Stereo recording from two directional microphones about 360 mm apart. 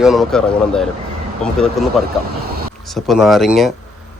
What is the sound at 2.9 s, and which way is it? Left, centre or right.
Speech, centre.